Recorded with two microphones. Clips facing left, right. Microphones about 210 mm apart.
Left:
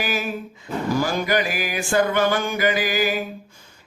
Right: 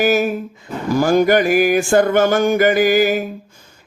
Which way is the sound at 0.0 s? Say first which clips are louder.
Right 10 dB; 45° right (ahead or behind).